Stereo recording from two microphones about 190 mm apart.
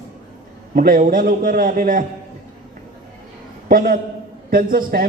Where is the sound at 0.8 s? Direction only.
45° right (ahead or behind).